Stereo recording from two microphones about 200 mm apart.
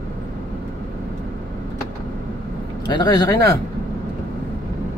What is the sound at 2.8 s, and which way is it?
Speech, 20° left (ahead or behind).